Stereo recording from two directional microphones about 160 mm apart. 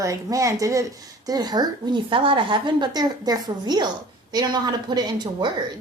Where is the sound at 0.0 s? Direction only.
20° right (ahead or behind).